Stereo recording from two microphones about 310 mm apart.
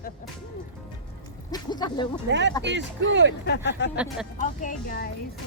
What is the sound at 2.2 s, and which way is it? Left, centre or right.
Speech, right.